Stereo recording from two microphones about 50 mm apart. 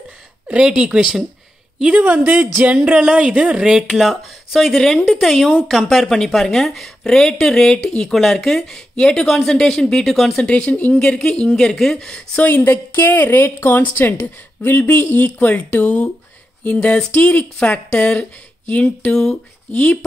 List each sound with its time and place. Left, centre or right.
0.5 s a woman's voice: centre
2.0 s speech: right
2.6 s speech: right
3.6 s speech: centre
10.4 s a woman's voice: left
11.0 s speech: centre
12.4 s speech: left
13.4 s speech: left
16.6 s a woman's voice: left
17.1 s a woman's voice: left